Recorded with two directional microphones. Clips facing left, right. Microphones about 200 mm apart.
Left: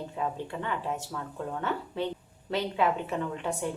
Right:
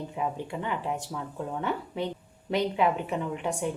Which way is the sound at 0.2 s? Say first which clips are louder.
Right 1 dB; 15° right (ahead or behind).